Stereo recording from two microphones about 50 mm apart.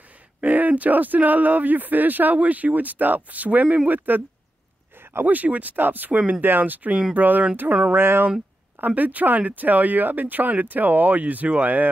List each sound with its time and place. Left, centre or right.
0.4 s speech: right
5.2 s speech: right
7.9 s speech: right
8.8 s speech: right